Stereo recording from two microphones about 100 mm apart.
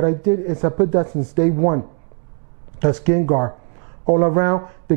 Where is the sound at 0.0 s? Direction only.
20° right (ahead or behind).